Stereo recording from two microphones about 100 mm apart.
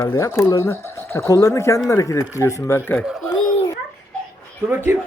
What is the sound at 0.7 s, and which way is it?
Speech, 25° left (ahead or behind).